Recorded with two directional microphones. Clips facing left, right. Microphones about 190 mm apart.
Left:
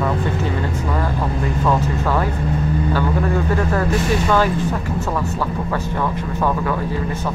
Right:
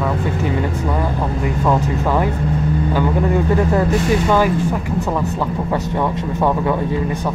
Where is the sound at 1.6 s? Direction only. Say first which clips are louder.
Right 2 dB; 15° right (ahead or behind).